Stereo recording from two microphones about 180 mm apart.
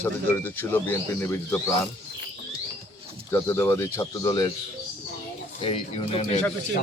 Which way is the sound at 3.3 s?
15° left (ahead or behind).